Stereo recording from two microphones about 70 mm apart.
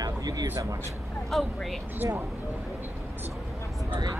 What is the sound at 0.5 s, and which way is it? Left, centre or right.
Speech, right.